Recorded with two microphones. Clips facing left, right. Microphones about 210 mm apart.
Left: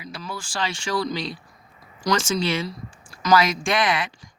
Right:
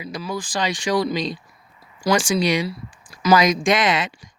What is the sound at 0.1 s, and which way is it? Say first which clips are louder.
Speech: right 6 dB; 15° right (ahead or behind).